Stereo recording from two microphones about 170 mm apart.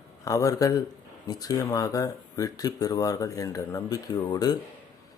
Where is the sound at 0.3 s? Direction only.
20° left (ahead or behind).